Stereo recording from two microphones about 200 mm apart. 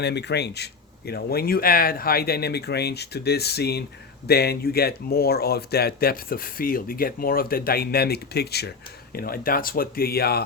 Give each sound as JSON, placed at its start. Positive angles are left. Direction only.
{"t": 0.0, "sound": "speech", "side_deg": 55}